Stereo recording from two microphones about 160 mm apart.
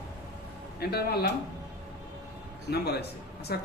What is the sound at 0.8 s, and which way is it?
Speech, 85° left.